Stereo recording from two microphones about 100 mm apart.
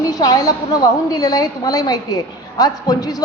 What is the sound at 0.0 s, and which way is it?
A woman's voice, 40° left (ahead or behind).